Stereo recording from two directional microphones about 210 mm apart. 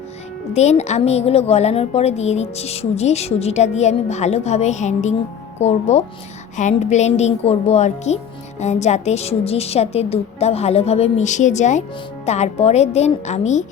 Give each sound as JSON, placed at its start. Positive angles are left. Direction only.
{"t": 0.5, "sound": "a woman's voice", "side_deg": 30}